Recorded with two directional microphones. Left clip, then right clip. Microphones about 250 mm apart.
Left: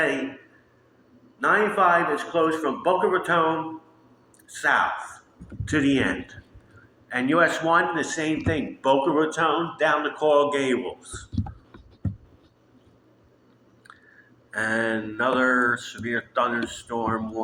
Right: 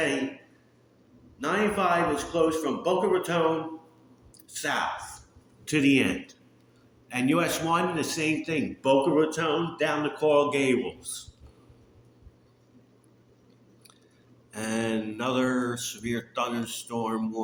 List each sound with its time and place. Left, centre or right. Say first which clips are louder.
1.4 s speech: left 6 dB; right
4.4 s speech: left 7 dB; right
7.1 s mantra: left 5 dB; right
8.1 s speech: left 2 dB; right
14.5 s mantra: left 6 dB; right